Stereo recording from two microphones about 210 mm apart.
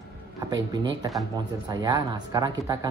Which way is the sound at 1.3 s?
20° right (ahead or behind).